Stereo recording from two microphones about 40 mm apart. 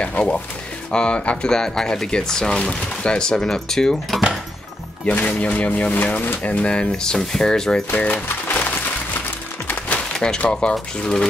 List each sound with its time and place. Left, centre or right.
0.9 s speech: left
1.5 s speech: centre
5.2 s speech: left
6.4 s speech: left
6.7 s speech: left
7.9 s speech: left
10.1 s speech: centre